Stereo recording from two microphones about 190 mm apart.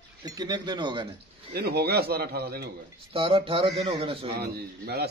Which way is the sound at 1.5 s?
55° right (ahead or behind).